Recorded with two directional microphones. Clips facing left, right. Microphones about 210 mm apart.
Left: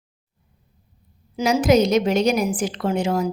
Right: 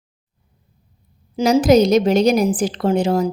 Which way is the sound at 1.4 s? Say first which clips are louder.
Right 4 dB; 30° right (ahead or behind).